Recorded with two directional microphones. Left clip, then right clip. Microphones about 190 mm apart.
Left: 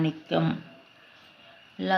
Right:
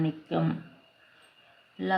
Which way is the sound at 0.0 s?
5° left (ahead or behind).